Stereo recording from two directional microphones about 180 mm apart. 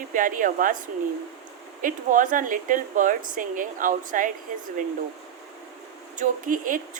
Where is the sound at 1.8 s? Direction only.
45° right (ahead or behind).